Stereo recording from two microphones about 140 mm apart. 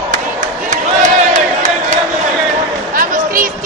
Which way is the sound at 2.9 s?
80° right.